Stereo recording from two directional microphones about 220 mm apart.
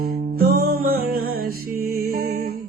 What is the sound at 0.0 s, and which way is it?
Music, 45° right (ahead or behind).